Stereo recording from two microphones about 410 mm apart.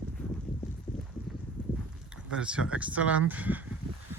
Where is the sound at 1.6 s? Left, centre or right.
Centre.